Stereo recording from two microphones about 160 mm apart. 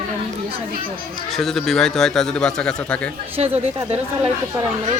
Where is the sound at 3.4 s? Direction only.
40° right (ahead or behind).